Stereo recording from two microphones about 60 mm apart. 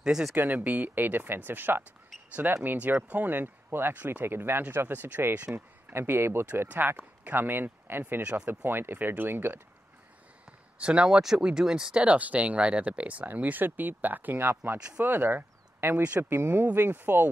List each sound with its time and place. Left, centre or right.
0.0 s speech: centre
0.4 s speech: right
5.9 s speech: right
6.5 s speech: right
8.2 s speech: centre
8.5 s speech: right
10.8 s speech: centre; by 17.3 s right